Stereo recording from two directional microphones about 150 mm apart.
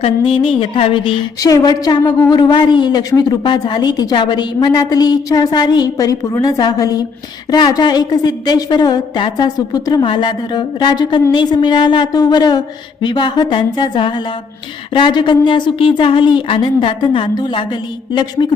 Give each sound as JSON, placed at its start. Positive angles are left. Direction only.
{"t": 0.2, "sound": "speech", "side_deg": 35}
{"t": 1.4, "sound": "a woman's voice", "side_deg": 25}